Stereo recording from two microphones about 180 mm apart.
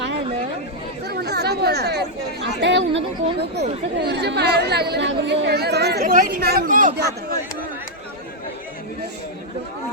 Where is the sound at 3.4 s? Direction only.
70° right (ahead or behind); by 7.1 s 50° right (ahead or behind).